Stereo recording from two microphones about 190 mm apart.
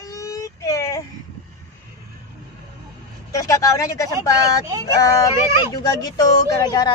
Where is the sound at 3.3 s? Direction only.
15° left (ahead or behind).